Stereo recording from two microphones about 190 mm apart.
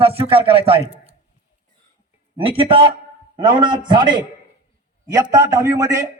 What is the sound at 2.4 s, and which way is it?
Speech, 30° right (ahead or behind).